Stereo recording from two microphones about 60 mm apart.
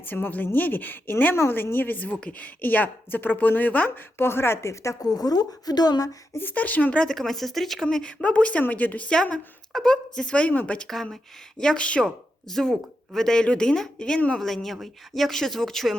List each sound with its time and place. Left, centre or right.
0.0 s a woman's voice: left
4.2 s a woman's voice: left
5.0 s a woman's voice: left
6.4 s speech: left
7.0 s speech: centre
7.9 s speech: centre
9.7 s a woman's voice: centre
10.8 s a woman's voice: centre
12.0 s a woman's voice: centre
14.2 s speech: centre
14.4 s speech: centre